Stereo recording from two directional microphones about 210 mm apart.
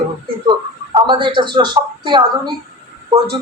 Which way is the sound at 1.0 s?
25° right (ahead or behind).